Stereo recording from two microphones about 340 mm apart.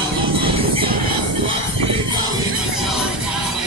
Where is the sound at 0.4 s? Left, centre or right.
Centre.